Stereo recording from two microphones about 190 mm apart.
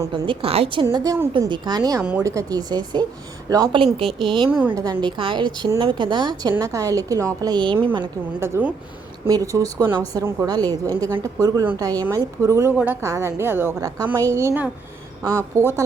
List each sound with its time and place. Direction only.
0.0 s a woman's voice: 25° right (ahead or behind)
0.9 s a woman's voice: 20° right (ahead or behind)
4.4 s a woman's voice: 10° right (ahead or behind); by 7.9 s 25° right (ahead or behind)
7.9 s a woman's voice: 15° right (ahead or behind)